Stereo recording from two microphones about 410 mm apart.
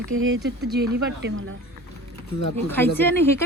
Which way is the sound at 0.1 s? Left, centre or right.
Right.